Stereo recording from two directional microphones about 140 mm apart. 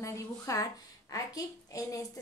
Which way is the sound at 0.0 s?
25° left (ahead or behind).